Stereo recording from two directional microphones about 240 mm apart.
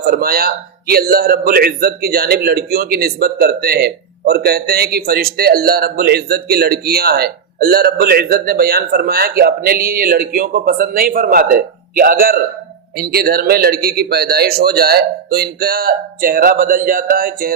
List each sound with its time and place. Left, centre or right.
0.0 s a man's voice: right